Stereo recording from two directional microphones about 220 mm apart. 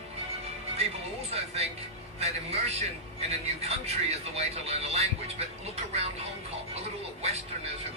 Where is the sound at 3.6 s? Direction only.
30° right (ahead or behind).